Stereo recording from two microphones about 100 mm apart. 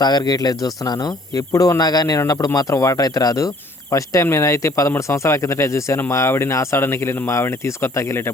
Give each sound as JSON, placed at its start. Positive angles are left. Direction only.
{"t": 0.0, "sound": "speech", "side_deg": 45}